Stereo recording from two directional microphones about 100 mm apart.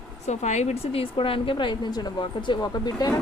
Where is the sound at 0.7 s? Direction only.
80° left; by 3.2 s 45° left (ahead or behind).